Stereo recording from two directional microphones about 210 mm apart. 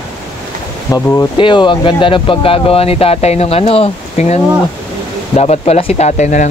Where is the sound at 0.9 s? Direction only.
15° left (ahead or behind).